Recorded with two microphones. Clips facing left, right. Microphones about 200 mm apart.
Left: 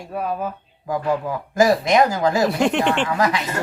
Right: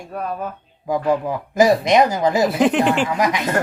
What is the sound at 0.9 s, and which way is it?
Speech, 15° right (ahead or behind).